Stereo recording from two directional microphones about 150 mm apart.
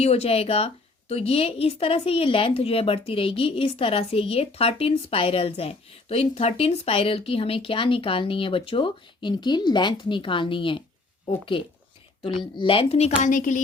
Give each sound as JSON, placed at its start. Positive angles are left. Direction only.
{"t": 0.0, "sound": "a woman's voice", "side_deg": 45}